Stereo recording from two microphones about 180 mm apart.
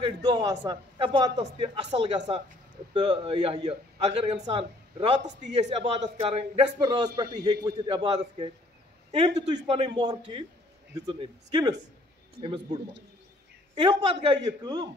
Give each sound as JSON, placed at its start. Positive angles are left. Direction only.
{"t": 0.0, "sound": "a man's voice", "side_deg": -25}
{"t": 13.7, "sound": "a man's voice", "side_deg": -25}